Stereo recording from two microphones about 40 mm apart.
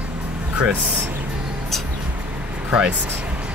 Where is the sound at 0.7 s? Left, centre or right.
Right.